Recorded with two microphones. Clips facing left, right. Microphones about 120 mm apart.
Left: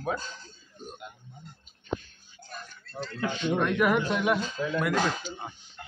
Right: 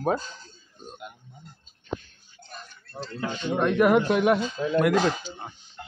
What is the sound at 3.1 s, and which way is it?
Speech, 30° right (ahead or behind).